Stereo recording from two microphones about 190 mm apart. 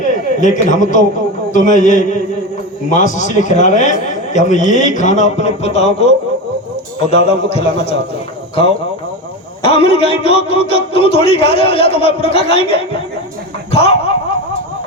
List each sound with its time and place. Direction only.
0.0 s a man's voice: 40° left (ahead or behind)
9.6 s speech: 30° left (ahead or behind)
13.7 s dog: 30° left (ahead or behind)